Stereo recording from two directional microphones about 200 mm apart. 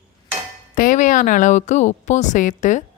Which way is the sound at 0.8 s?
40° left (ahead or behind).